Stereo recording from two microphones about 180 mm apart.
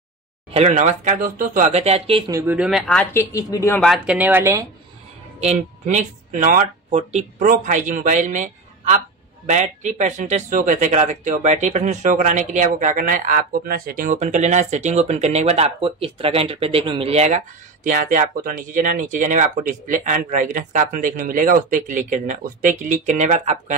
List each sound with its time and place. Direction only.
0.5 s speech: 35° right (ahead or behind)
2.3 s speech: 10° right (ahead or behind)
2.9 s a woman's voice: 10° left (ahead or behind)
3.3 s speech: 20° left (ahead or behind)
3.8 s speech: 5° right (ahead or behind)
5.4 s speech: 40° right (ahead or behind)
6.9 s speech: 35° right (ahead or behind)
17.8 s speech: 45° right (ahead or behind)